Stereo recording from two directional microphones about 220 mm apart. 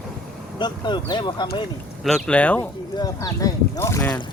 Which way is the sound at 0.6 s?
20° left (ahead or behind).